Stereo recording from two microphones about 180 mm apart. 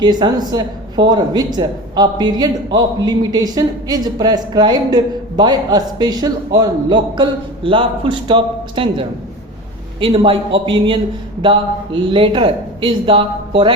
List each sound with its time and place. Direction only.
0.0 s speech: 25° right (ahead or behind)